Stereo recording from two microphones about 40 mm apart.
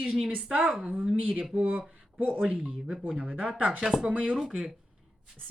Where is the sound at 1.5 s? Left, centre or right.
Right.